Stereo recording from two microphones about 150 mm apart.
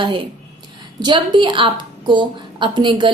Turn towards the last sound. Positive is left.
turn(degrees=-30)  # may be behind; listen again after turning